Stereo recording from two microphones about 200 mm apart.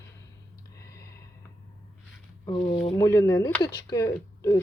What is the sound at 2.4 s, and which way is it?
Speech, 20° left (ahead or behind).